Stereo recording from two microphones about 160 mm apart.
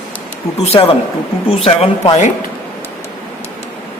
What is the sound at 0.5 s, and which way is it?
Speech, 40° left (ahead or behind).